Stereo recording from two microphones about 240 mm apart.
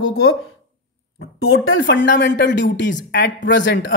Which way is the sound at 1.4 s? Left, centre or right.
Left.